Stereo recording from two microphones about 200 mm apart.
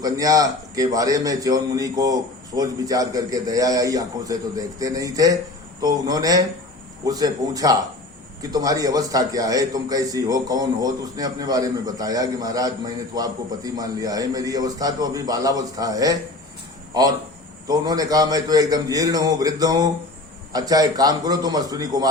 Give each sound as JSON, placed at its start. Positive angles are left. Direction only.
{"t": 0.0, "sound": "a man's voice", "side_deg": -15}